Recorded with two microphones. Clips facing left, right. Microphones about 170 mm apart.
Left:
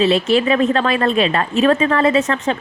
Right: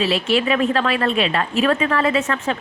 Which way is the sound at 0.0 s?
35° left (ahead or behind).